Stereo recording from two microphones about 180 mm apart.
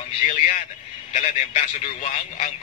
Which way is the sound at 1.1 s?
35° left (ahead or behind).